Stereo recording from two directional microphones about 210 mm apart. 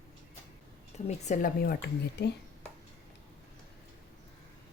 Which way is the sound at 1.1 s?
35° left (ahead or behind).